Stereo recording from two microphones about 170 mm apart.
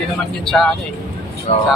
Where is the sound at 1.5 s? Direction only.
40° left (ahead or behind).